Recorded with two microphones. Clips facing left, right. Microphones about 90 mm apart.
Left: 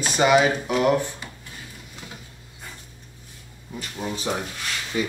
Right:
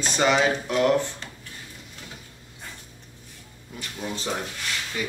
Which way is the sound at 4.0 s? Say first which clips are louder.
Left 2 dB; 10° left (ahead or behind).